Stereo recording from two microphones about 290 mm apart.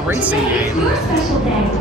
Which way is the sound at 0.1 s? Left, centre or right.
Centre.